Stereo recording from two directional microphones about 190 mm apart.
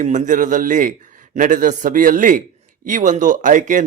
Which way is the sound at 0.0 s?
40° right (ahead or behind).